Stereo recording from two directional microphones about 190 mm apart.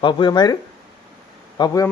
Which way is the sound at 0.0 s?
25° left (ahead or behind).